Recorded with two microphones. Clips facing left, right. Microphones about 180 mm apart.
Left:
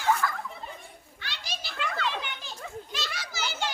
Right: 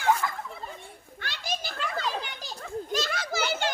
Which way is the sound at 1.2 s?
50° right (ahead or behind).